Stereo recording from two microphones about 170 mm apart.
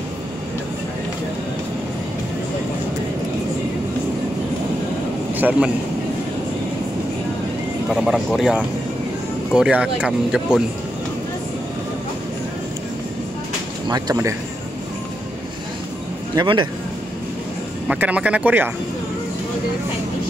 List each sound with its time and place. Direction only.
5.3 s a man's voice: 10° right (ahead or behind)
7.9 s speech: centre (ahead or behind)
13.8 s speech: 25° right (ahead or behind)
16.3 s speech: 30° right (ahead or behind)
17.8 s speech: 5° right (ahead or behind)